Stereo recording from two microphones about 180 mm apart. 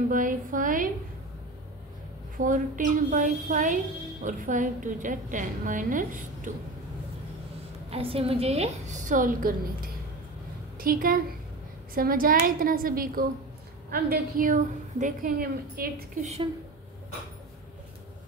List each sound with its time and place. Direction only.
0.1 s a woman's voice: 50° right (ahead or behind)
2.3 s a woman's voice: 45° right (ahead or behind)
7.9 s a woman's voice: 30° right (ahead or behind); by 16.3 s 55° right (ahead or behind)